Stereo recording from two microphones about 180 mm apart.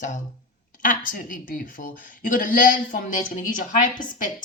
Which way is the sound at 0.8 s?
50° left (ahead or behind).